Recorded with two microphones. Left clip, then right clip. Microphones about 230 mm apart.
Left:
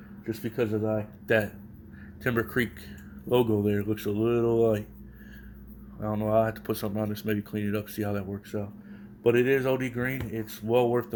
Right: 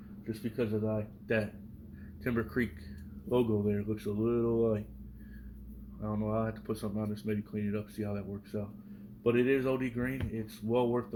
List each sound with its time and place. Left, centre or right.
0.3 s speech: left
6.0 s speech: left